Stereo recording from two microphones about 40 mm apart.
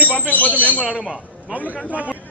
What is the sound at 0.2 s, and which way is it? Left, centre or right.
Speech, left.